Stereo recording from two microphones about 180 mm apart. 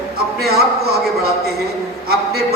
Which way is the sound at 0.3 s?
60° right (ahead or behind).